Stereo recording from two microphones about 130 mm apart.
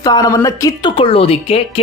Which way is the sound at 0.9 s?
45° left (ahead or behind).